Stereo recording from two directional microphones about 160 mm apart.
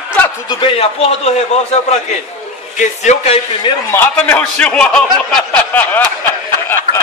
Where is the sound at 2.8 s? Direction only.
45° left (ahead or behind).